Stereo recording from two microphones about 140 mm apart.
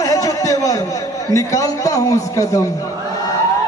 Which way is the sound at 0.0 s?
25° left (ahead or behind).